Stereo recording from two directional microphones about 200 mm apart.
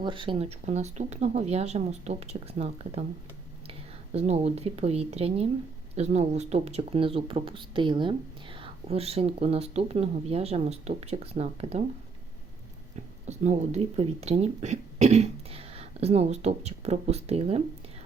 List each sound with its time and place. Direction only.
0.0 s speech: 25° right (ahead or behind)
4.1 s speech: 35° right (ahead or behind)
13.2 s speech: 35° right (ahead or behind)